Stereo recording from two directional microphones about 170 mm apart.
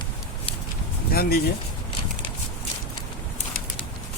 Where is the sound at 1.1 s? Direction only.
65° left (ahead or behind).